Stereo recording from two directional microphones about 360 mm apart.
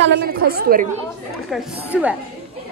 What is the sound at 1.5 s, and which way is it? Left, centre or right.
Speech, centre.